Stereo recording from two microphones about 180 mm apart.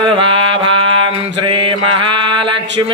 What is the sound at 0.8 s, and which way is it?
Mantra, 25° right (ahead or behind).